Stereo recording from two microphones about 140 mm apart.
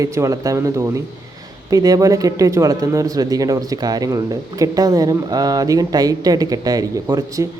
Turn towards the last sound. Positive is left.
turn(degrees=-25)  # may be behind; listen again after turning